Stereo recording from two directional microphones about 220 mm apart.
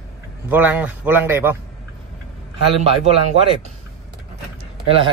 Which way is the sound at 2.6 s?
25° right (ahead or behind).